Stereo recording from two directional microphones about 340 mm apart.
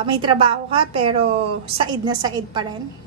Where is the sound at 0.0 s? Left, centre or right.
Centre.